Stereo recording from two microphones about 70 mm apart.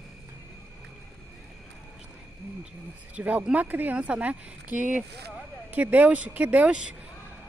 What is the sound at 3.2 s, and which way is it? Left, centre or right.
Speech, right.